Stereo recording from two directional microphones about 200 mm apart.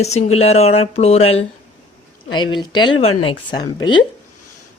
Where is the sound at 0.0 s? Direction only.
35° left (ahead or behind).